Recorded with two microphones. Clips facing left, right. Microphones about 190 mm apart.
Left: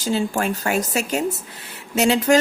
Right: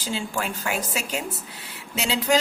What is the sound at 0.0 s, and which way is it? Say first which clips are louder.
Speech: left 7 dB; 45° left (ahead or behind).